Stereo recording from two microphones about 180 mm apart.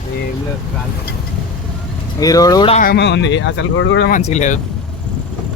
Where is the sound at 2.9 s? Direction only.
75° left (ahead or behind).